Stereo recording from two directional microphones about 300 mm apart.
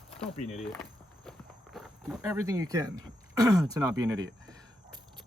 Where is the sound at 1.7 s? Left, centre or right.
Centre.